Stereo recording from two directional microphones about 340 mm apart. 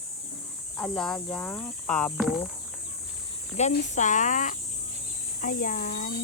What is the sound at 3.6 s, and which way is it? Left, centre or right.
Speech, left.